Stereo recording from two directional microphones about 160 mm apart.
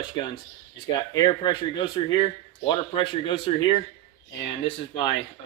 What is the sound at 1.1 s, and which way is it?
A man's voice, 30° left (ahead or behind).